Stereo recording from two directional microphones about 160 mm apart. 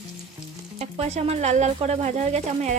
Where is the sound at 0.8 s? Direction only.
45° right (ahead or behind).